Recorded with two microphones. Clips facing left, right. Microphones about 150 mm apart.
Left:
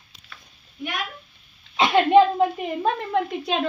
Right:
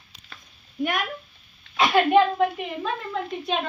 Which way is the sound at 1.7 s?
25° left (ahead or behind).